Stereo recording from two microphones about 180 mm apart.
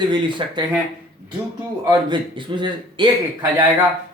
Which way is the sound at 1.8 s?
25° right (ahead or behind).